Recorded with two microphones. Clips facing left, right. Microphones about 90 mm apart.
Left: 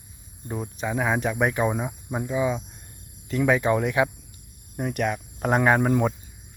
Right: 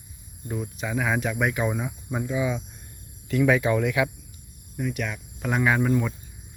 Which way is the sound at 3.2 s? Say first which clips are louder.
Even; 30° left (ahead or behind).